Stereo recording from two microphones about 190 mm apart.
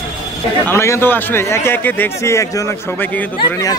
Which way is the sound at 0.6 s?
15° left (ahead or behind).